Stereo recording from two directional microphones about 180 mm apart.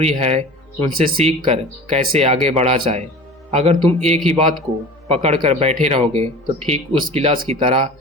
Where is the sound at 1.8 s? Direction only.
35° right (ahead or behind).